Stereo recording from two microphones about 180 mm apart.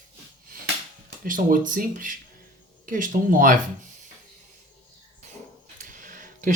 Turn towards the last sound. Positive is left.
turn(degrees=-50)  # may be behind; listen again after turning